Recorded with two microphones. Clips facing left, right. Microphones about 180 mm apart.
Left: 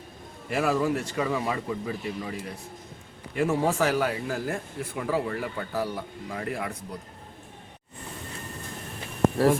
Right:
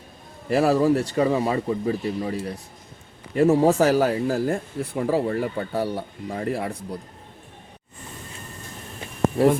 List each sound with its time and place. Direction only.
0.4 s speech: 35° right (ahead or behind)